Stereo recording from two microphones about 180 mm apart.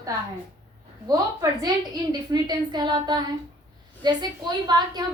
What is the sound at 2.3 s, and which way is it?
A woman's voice, 25° right (ahead or behind).